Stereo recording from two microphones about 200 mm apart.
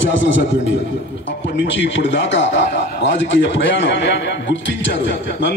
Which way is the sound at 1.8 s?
65° left (ahead or behind).